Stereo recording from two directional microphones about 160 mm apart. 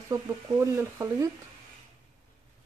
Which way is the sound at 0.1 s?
15° right (ahead or behind).